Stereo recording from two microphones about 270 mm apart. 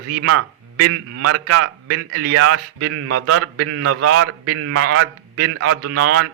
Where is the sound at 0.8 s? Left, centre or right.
Right.